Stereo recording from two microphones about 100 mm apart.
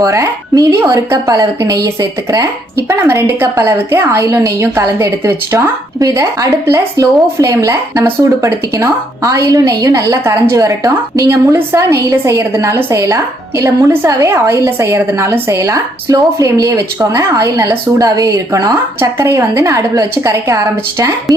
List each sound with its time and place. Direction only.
0.0 s a woman's voice: 35° right (ahead or behind)
3.0 s a woman's voice: 25° right (ahead or behind)
18.9 s a woman's voice: 25° right (ahead or behind)